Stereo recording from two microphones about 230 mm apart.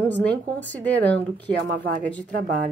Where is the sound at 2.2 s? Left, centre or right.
Right.